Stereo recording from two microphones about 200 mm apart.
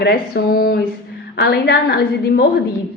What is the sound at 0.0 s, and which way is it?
A woman's voice, 50° left (ahead or behind).